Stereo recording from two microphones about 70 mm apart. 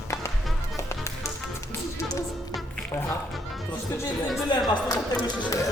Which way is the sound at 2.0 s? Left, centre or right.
Left.